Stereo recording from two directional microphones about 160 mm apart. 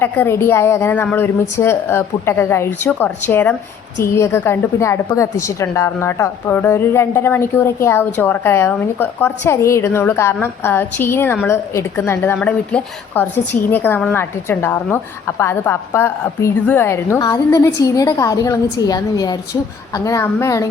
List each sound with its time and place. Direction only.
0.0 s a woman's voice: 15° left (ahead or behind)